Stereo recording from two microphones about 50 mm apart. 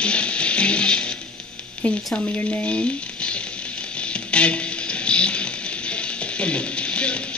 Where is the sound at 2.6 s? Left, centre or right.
Left.